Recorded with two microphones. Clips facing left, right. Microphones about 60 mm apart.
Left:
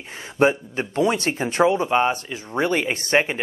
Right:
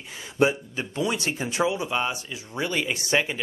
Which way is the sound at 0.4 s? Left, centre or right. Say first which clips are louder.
Left 4 dB; left.